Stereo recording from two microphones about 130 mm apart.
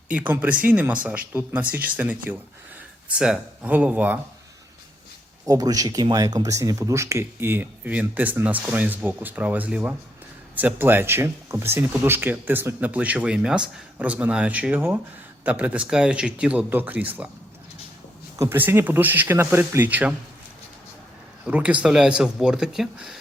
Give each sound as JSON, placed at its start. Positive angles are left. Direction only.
{"t": 0.1, "sound": "speech", "side_deg": -10}
{"t": 5.5, "sound": "speech", "side_deg": -25}
{"t": 18.3, "sound": "speech", "side_deg": -15}
{"t": 21.4, "sound": "speech", "side_deg": -10}